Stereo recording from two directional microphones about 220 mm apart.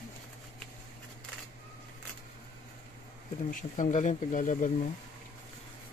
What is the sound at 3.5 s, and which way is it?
Speech, 35° left (ahead or behind).